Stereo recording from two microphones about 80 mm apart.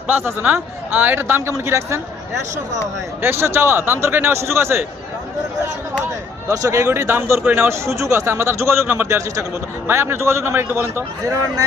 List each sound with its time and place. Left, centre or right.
0.1 s a man's voice: right
3.2 s a man's voice: right
6.5 s a man's voice: right